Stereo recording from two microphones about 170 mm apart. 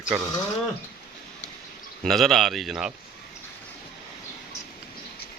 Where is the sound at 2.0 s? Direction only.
Centre (ahead or behind).